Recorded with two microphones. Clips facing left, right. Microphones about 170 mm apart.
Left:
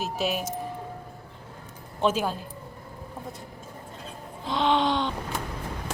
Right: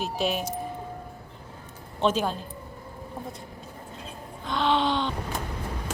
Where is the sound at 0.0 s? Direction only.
5° left (ahead or behind).